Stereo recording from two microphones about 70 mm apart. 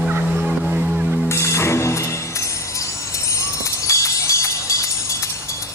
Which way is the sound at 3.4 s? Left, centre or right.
Left.